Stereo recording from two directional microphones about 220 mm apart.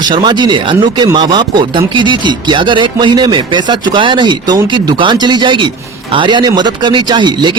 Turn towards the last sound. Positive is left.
turn(degrees=-20)  # may be behind; listen again after turning